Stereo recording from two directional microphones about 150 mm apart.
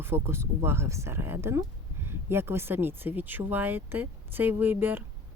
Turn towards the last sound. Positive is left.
turn(degrees=-15)  # may be behind; listen again after turning